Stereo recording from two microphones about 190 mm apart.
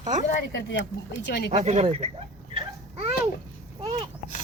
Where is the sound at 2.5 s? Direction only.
25° right (ahead or behind).